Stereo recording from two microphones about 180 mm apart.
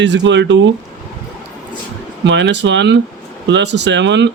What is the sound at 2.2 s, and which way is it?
Speech, 80° right.